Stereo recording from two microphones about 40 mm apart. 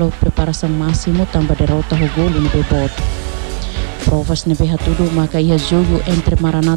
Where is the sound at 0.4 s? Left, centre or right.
Centre.